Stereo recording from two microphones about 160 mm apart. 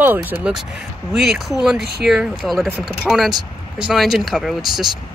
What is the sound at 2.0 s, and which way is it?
Speech, centre (ahead or behind).